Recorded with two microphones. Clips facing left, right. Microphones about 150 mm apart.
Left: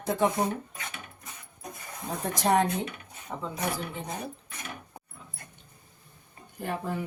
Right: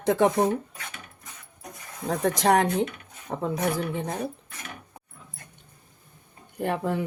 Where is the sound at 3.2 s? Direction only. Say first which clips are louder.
Right 7 dB; 60° right (ahead or behind).